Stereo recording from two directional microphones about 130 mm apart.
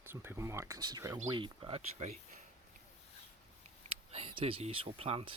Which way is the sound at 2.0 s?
65° right (ahead or behind).